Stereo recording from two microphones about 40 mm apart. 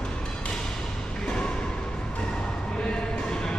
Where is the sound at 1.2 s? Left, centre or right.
Left.